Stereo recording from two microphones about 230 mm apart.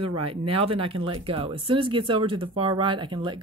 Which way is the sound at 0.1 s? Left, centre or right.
Right.